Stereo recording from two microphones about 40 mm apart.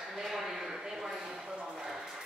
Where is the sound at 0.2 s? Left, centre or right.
Centre.